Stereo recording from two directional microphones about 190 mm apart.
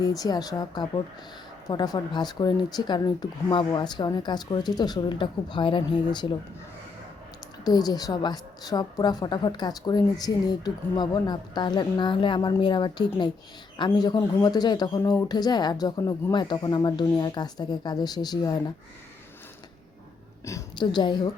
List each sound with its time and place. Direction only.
0.0 s a woman's voice: 20° left (ahead or behind)
7.6 s a woman's voice: 20° left (ahead or behind)
20.4 s a woman's voice: 15° left (ahead or behind)